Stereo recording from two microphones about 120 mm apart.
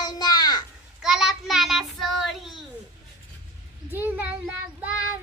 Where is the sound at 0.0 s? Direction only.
35° left (ahead or behind).